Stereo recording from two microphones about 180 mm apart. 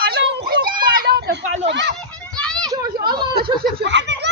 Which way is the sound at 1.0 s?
70° right (ahead or behind).